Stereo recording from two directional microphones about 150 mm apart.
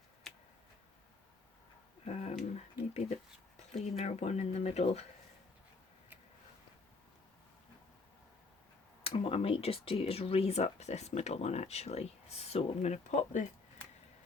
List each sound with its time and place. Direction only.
2.0 s a sound: 45° left (ahead or behind)
2.9 s speech: 45° left (ahead or behind)
9.0 s speech: 40° left (ahead or behind)